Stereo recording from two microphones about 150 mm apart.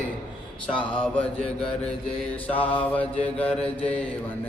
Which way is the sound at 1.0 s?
5° left (ahead or behind).